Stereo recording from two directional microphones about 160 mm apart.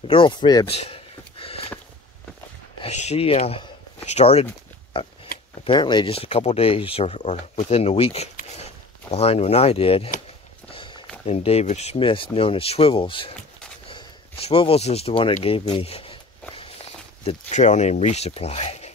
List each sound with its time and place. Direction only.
0.1 s speech: 30° left (ahead or behind)
0.7 s a sound: 35° left (ahead or behind)
2.8 s speech: 45° left (ahead or behind)
10.7 s walk: 30° left (ahead or behind)
11.2 s speech: 40° left (ahead or behind)
13.8 s a sound: 35° left (ahead or behind)
17.2 s speech: 45° left (ahead or behind)